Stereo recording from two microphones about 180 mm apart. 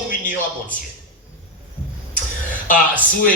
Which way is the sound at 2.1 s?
50° left (ahead or behind).